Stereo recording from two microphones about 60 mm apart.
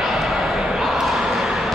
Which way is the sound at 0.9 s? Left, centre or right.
Centre.